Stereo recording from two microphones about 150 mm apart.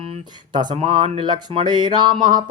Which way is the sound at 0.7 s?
40° right (ahead or behind).